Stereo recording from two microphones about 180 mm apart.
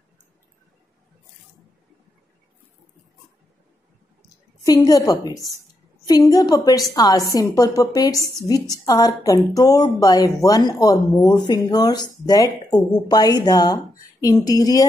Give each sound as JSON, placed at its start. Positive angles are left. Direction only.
{"t": 4.6, "sound": "a woman's voice", "side_deg": 20}